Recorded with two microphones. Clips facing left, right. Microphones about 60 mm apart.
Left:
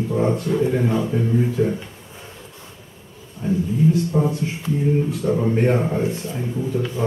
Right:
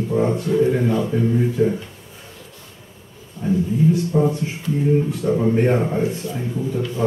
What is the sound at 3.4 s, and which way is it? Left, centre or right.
Speech, centre.